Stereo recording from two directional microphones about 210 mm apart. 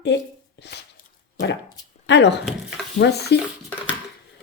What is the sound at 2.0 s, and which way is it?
Speech, 55° left (ahead or behind).